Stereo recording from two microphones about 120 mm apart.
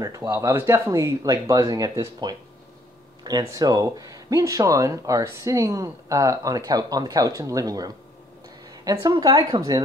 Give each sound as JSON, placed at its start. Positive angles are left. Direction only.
{"t": 0.0, "sound": "speech", "side_deg": -25}
{"t": 3.4, "sound": "speech", "side_deg": -30}